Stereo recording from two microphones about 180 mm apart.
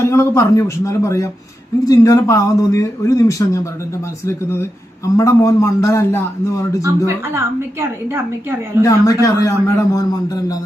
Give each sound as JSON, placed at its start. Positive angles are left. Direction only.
{"t": 0.0, "sound": "a man's voice", "side_deg": 15}
{"t": 7.3, "sound": "a woman's voice", "side_deg": -15}
{"t": 8.8, "sound": "a man's voice", "side_deg": 15}